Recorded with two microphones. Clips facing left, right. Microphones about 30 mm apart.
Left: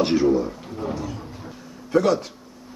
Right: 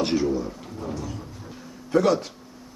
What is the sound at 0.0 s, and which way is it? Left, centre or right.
A man's voice, centre.